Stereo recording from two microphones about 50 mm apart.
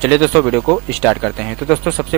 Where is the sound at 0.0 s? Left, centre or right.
Centre.